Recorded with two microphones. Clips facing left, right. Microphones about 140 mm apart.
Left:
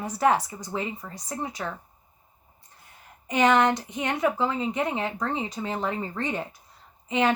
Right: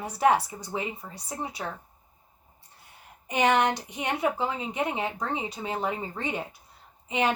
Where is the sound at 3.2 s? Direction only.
15° right (ahead or behind).